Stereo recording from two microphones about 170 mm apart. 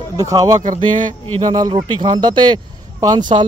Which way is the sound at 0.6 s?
50° right (ahead or behind).